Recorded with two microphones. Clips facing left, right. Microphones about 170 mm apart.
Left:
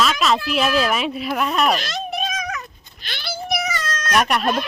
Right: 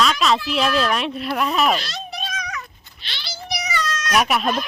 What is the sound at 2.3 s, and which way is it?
Cat, 50° left (ahead or behind).